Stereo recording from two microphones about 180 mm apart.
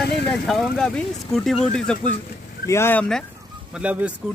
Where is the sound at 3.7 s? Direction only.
5° right (ahead or behind).